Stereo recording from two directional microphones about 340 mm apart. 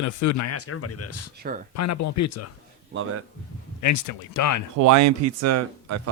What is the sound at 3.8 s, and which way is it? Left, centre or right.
Speech, left.